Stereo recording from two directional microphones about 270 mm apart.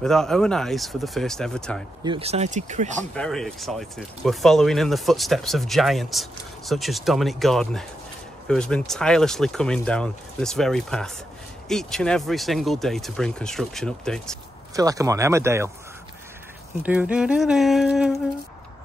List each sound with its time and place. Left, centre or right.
0.0 s speech: centre
2.0 s speech: right
3.2 s speech: centre
14.8 s speech: centre
16.8 s speech: centre